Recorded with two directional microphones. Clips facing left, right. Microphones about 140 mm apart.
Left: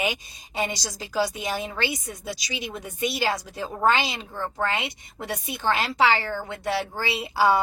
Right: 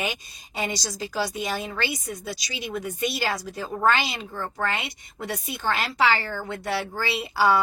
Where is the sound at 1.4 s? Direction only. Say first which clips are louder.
Even; 25° left (ahead or behind).